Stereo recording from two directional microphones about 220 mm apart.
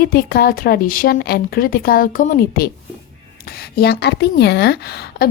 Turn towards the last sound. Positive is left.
turn(degrees=45)  # may be behind; listen again after turning